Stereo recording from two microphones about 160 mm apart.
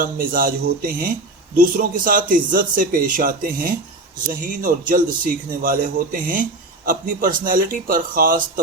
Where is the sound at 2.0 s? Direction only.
60° right (ahead or behind).